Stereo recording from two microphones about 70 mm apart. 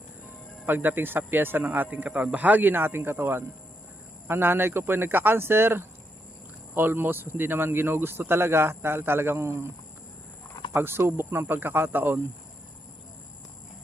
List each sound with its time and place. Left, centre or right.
0.6 s speech: right
10.8 s speech: right